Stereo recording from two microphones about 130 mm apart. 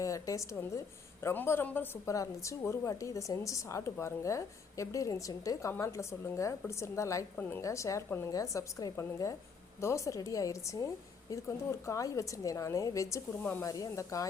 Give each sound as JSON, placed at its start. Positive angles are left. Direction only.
{"t": 0.0, "sound": "a woman's voice", "side_deg": 25}
{"t": 13.4, "sound": "speech", "side_deg": 15}
{"t": 13.7, "sound": "a woman's voice", "side_deg": 25}